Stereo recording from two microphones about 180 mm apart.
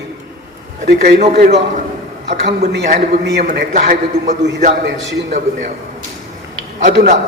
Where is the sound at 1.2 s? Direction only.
40° right (ahead or behind).